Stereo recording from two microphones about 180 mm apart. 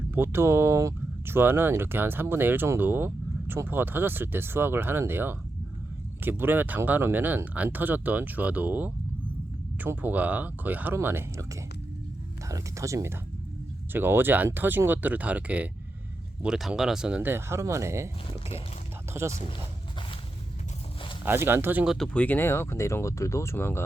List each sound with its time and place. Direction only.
0.1 s speech: 15° right (ahead or behind)
12.5 s speech: 15° right (ahead or behind)
19.1 s speech: 15° right (ahead or behind)
21.2 s speech: 10° right (ahead or behind)
21.9 s speech: 5° left (ahead or behind)